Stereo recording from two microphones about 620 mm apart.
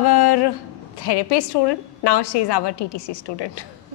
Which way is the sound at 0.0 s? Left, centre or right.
Left.